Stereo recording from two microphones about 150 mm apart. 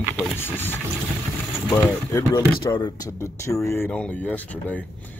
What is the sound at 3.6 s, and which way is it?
Speech, 15° left (ahead or behind).